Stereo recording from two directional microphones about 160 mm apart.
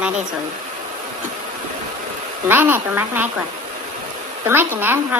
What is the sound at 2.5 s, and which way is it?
Speech, 15° right (ahead or behind).